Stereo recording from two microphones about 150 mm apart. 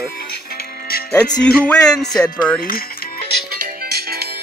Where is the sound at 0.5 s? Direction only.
90° left.